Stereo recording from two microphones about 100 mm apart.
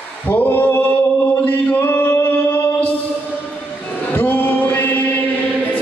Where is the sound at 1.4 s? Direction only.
20° left (ahead or behind).